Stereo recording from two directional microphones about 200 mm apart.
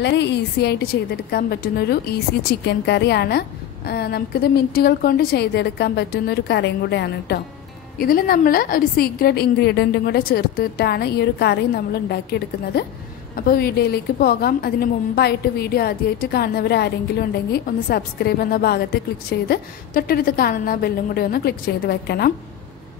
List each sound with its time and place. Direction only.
0.0 s a woman's voice: 60° left (ahead or behind)
8.0 s a woman's voice: 45° left (ahead or behind)